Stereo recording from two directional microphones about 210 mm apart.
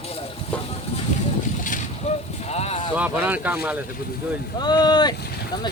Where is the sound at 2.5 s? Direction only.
30° left (ahead or behind).